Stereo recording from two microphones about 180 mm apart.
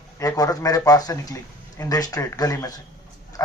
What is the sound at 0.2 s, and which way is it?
Speech, 20° left (ahead or behind).